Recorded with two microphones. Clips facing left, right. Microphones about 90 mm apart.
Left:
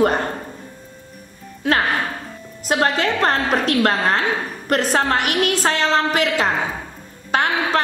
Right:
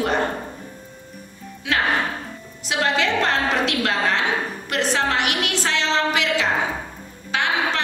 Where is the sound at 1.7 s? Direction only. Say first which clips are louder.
Left 2 dB; 45° left (ahead or behind).